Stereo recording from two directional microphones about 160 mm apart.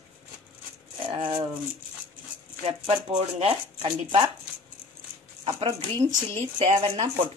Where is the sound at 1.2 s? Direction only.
30° right (ahead or behind).